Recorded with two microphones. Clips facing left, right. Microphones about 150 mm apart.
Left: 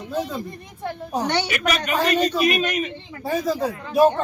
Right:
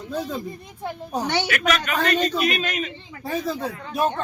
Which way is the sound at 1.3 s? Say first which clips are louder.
Right 2 dB; centre (ahead or behind).